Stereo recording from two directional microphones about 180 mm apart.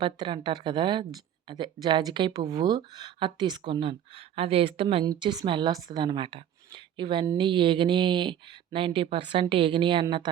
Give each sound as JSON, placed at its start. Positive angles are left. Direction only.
{"t": 0.0, "sound": "speech", "side_deg": -25}